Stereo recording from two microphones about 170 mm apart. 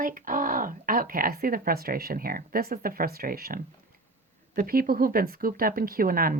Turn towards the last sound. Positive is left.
turn(degrees=-55)  # may be behind; listen again after turning